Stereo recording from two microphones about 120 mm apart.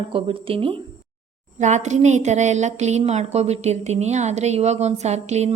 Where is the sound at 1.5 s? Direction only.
80° right.